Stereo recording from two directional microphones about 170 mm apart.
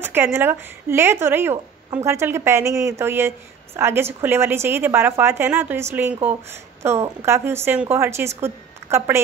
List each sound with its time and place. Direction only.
0.0 s a woman's voice: 15° right (ahead or behind)